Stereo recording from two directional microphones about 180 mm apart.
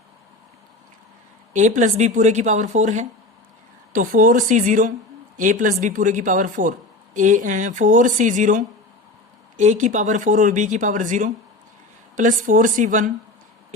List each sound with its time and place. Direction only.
1.5 s a woman's voice: 45° right (ahead or behind)